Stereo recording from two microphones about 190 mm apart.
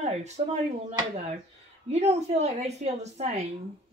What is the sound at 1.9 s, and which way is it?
A woman's voice, 35° right (ahead or behind).